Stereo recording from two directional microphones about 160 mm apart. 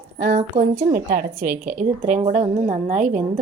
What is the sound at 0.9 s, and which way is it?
Speech, 65° right (ahead or behind).